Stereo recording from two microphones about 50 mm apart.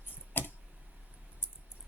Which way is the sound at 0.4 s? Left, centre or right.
Left.